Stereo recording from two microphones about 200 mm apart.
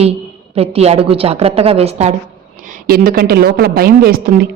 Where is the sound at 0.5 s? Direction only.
30° right (ahead or behind).